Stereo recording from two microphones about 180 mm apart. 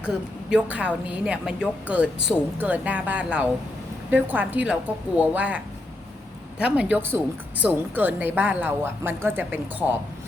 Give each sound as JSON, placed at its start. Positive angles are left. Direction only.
{"t": 0.5, "sound": "speech", "side_deg": -5}